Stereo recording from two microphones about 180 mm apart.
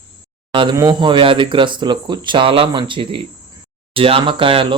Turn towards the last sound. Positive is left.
turn(degrees=-30)  # may be behind; listen again after turning